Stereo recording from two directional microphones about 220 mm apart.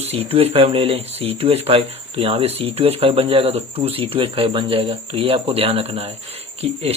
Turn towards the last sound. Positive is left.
turn(degrees=-30)  # may be behind; listen again after turning